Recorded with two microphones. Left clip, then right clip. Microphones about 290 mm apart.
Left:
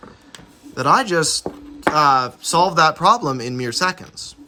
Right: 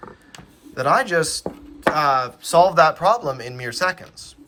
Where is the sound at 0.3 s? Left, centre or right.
Centre.